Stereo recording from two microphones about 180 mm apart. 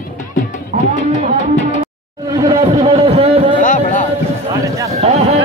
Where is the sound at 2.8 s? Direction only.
30° right (ahead or behind).